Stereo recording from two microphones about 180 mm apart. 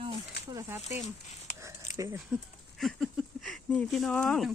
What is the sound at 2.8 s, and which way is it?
Speech, centre (ahead or behind).